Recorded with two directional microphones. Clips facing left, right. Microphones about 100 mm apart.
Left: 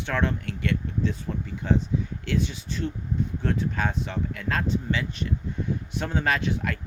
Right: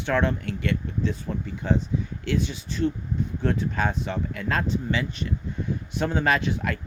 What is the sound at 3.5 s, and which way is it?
Speech, 15° right (ahead or behind).